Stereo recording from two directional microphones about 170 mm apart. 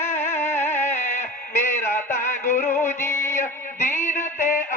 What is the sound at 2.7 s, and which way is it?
Music, 15° left (ahead or behind).